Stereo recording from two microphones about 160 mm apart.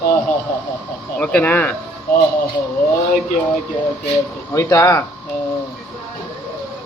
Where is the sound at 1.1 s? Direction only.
10° left (ahead or behind).